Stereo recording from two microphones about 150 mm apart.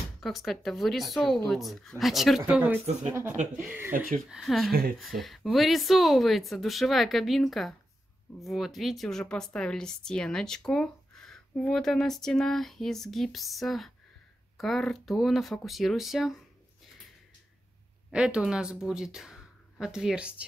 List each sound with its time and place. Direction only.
0.2 s speech: centre (ahead or behind)
2.4 s speech: 10° right (ahead or behind)
4.3 s speech: centre (ahead or behind)
18.1 s speech: 5° right (ahead or behind)